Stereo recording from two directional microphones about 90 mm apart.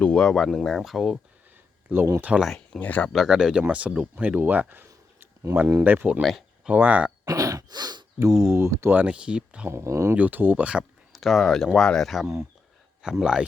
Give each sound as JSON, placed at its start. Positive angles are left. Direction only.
{"t": 0.0, "sound": "speech", "side_deg": 10}
{"t": 1.9, "sound": "speech", "side_deg": -20}
{"t": 2.3, "sound": "speech", "side_deg": -10}
{"t": 2.7, "sound": "speech", "side_deg": 15}
{"t": 3.1, "sound": "speech", "side_deg": -5}
{"t": 5.2, "sound": "a sound", "side_deg": -30}
{"t": 5.8, "sound": "speech", "side_deg": -20}
{"t": 7.3, "sound": "throat clearing", "side_deg": -40}
{"t": 8.2, "sound": "speech", "side_deg": -35}
{"t": 9.0, "sound": "speech", "side_deg": -10}
{"t": 9.6, "sound": "speech", "side_deg": -30}
{"t": 10.2, "sound": "speech", "side_deg": -20}
{"t": 11.1, "sound": "speech", "side_deg": 0}